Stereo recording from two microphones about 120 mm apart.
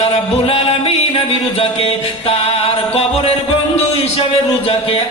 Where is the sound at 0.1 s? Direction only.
55° left (ahead or behind).